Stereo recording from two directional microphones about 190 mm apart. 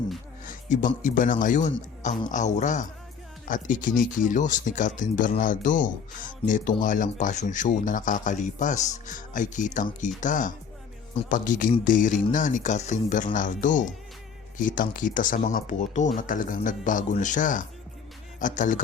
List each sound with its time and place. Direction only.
0.4 s a man's voice: 45° left (ahead or behind)